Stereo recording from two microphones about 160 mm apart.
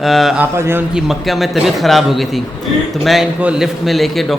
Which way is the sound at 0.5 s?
15° right (ahead or behind).